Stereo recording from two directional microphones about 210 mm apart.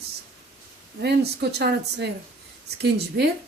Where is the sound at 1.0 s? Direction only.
50° right (ahead or behind).